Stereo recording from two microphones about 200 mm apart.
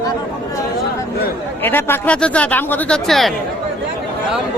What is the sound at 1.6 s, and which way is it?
Speech, 10° left (ahead or behind).